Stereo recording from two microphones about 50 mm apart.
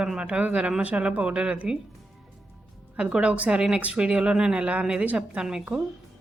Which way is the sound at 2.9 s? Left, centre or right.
Centre.